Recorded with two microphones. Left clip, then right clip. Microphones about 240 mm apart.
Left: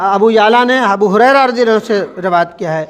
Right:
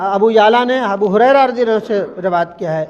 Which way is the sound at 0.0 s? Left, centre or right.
Left.